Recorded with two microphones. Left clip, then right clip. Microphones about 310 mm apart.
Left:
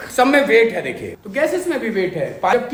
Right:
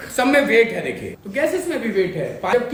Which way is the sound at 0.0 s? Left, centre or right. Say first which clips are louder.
Left 2 dB; centre.